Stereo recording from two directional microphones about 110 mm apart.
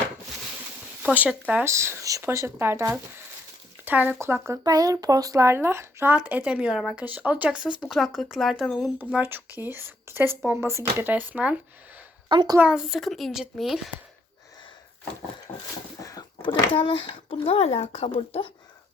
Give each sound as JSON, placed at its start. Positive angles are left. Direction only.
{"t": 1.0, "sound": "speech", "side_deg": -15}
{"t": 1.6, "sound": "speech", "side_deg": -25}
{"t": 6.1, "sound": "speech", "side_deg": -10}
{"t": 9.0, "sound": "speech", "side_deg": -15}
{"t": 12.3, "sound": "a woman's voice", "side_deg": -40}
{"t": 12.5, "sound": "speech", "side_deg": -10}
{"t": 16.0, "sound": "a sound", "side_deg": 30}
{"t": 16.7, "sound": "speech", "side_deg": 50}